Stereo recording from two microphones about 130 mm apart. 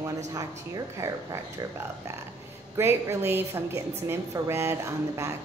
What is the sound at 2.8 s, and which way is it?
A woman's voice, 20° right (ahead or behind).